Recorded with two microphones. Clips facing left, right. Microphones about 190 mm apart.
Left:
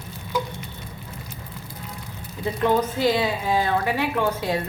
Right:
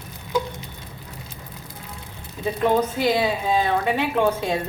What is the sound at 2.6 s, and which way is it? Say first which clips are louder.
A woman's voice: even; 20° right (ahead or behind).